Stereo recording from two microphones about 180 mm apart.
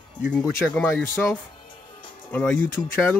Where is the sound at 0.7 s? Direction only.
5° left (ahead or behind).